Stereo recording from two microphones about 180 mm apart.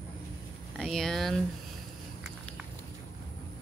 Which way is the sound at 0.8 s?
Centre (ahead or behind).